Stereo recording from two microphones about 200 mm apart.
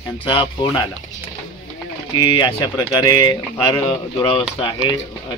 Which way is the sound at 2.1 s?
20° left (ahead or behind).